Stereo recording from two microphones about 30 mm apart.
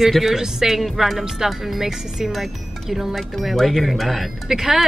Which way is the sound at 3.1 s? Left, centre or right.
Centre.